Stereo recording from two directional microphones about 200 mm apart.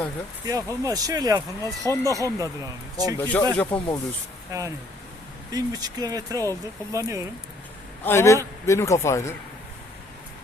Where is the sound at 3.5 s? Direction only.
10° left (ahead or behind).